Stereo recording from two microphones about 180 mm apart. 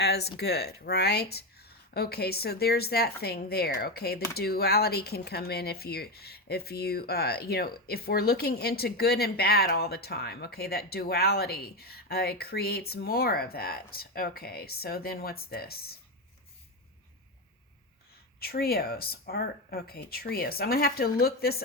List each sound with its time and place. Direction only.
0.0 s speech: 65° left (ahead or behind)
18.3 s speech: 60° left (ahead or behind)